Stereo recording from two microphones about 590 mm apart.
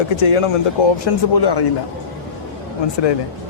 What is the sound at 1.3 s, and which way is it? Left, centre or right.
Speech, left.